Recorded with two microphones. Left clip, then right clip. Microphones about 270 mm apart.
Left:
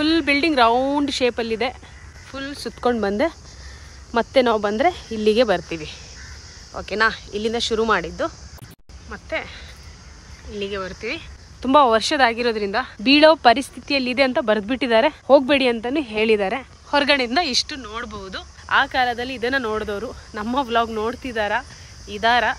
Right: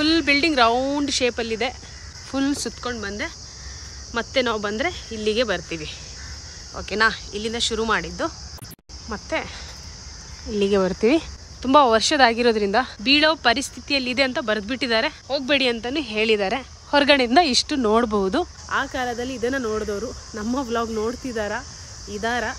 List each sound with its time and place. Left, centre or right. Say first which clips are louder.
0.0 s speech: even; centre
2.3 s speech: right 5 dB; centre
2.8 s speech: left 8 dB; centre
10.5 s speech: right 7 dB; centre
18.7 s speech: left 10 dB; centre